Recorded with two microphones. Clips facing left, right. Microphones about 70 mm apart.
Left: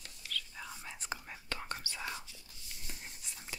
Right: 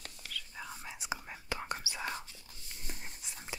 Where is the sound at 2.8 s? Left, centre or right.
Right.